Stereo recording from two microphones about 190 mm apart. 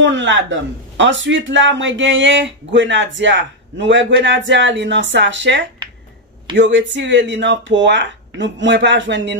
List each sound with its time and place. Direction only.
0.0 s a man's voice: 70° right (ahead or behind)